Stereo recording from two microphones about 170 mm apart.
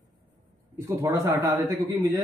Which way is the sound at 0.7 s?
15° right (ahead or behind).